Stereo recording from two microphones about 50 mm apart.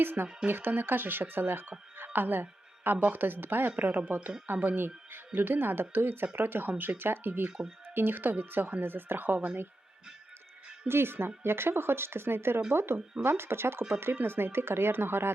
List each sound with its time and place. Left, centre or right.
0.0 s a woman's voice: right
3.7 s a woman's voice: right
10.8 s speech: right